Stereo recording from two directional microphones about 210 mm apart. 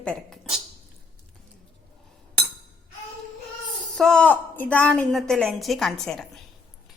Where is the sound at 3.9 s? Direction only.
5° left (ahead or behind).